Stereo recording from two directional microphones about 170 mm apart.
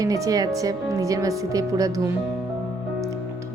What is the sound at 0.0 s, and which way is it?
Speech, 20° right (ahead or behind).